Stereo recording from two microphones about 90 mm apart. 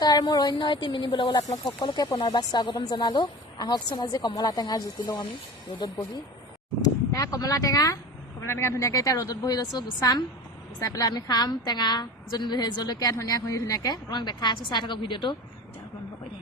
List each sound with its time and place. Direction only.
0.0 s a woman's voice: 50° left (ahead or behind)
6.8 s speech: 40° left (ahead or behind)
8.4 s a woman's voice: 30° left (ahead or behind); by 15.4 s 60° left (ahead or behind)